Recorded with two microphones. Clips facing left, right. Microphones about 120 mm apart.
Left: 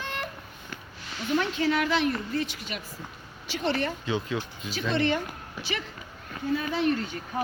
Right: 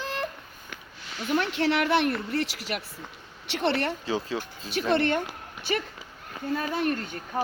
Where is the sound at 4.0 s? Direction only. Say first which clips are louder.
Even; 35° right (ahead or behind).